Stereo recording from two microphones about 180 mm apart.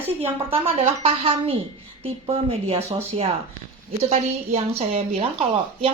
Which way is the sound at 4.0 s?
35° right (ahead or behind).